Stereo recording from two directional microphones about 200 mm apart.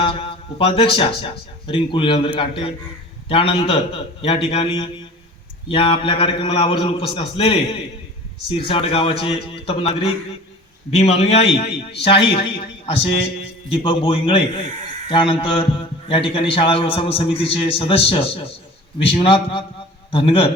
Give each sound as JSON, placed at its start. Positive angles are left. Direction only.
{"t": 0.0, "sound": "a man's voice", "side_deg": 25}